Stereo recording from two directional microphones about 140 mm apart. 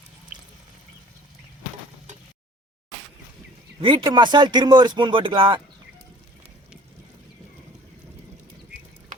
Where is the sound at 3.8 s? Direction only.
35° right (ahead or behind).